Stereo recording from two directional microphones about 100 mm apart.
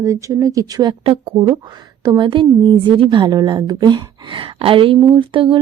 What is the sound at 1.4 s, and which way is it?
Speech, 45° right (ahead or behind).